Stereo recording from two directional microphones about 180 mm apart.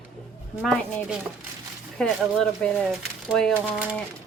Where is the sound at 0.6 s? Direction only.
Centre (ahead or behind).